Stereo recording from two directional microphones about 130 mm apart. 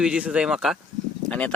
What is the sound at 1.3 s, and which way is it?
Speech, 10° left (ahead or behind).